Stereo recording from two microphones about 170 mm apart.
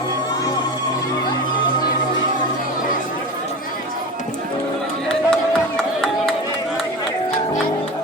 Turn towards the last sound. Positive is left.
turn(degrees=5)  # may be behind; listen again after turning